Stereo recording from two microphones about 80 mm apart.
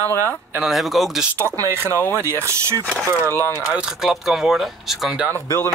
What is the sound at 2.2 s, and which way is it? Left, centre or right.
Speech, right.